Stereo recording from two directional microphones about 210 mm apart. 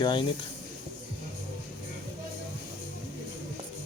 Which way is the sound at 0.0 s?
20° left (ahead or behind).